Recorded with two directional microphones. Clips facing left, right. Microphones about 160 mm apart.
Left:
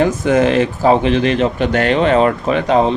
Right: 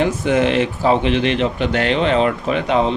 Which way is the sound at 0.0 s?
45° left (ahead or behind).